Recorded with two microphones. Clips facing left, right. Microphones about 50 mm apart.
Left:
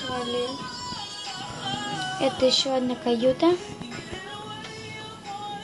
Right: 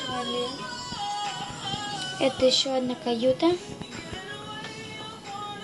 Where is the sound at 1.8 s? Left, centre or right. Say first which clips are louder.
Left 3 dB; left.